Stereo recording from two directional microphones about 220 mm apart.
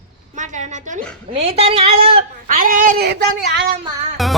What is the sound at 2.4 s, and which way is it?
Speech, 40° right (ahead or behind).